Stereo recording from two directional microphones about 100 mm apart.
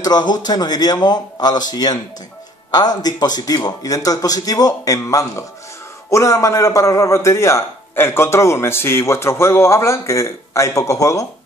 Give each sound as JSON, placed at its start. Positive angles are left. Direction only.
{"t": 0.0, "sound": "a man's voice", "side_deg": 45}